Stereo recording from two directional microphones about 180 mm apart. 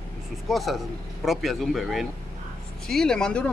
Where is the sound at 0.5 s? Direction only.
Centre (ahead or behind).